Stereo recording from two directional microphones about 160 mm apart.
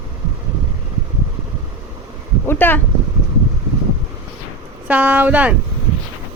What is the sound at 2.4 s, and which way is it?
Speech, 15° left (ahead or behind).